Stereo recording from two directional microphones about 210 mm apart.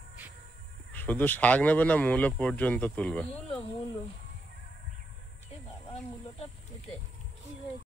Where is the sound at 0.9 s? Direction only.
10° left (ahead or behind).